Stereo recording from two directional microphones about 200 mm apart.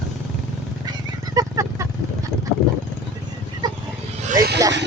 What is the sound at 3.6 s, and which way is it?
Vehicle, 20° right (ahead or behind).